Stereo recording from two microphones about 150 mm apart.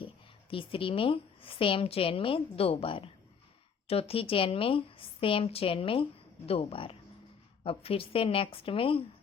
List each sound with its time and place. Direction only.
0.5 s a woman's voice: 35° left (ahead or behind)